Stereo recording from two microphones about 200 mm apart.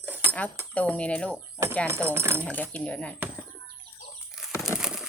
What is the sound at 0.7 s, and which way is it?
Speech, 5° left (ahead or behind).